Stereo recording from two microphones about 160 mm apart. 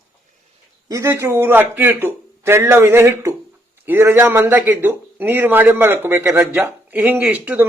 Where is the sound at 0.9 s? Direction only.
15° right (ahead or behind).